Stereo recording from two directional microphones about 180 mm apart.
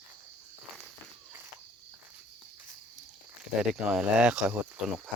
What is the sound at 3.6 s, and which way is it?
Speech, 5° right (ahead or behind).